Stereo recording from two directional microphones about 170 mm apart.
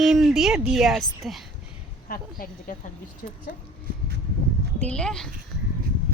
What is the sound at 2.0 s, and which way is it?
A woman's voice, 55° left (ahead or behind).